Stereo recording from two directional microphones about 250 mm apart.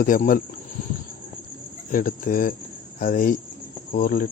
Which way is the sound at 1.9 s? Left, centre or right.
Left.